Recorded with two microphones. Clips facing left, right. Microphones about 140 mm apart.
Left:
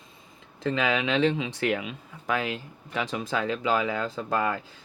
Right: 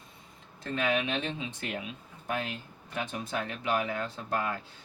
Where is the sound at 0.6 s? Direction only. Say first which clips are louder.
Left 4 dB; 90° left.